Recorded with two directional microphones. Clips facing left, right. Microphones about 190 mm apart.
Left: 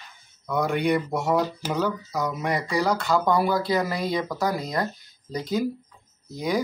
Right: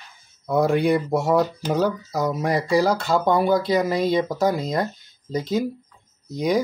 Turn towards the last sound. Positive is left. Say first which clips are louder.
# right 4 dB
turn(degrees=-20)  # may be behind; listen again after turning